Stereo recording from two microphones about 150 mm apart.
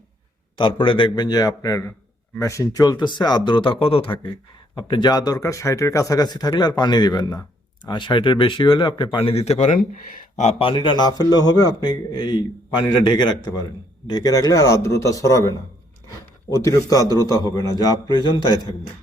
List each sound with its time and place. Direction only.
0.5 s speech: 35° left (ahead or behind); by 10.5 s 55° left (ahead or behind)
10.6 s speech: 35° left (ahead or behind)
16.6 s speech: 20° left (ahead or behind)